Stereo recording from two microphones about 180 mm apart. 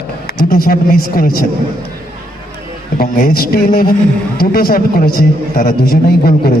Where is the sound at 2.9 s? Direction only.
60° left (ahead or behind).